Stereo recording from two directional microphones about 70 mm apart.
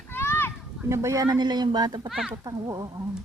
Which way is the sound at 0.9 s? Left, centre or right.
Right.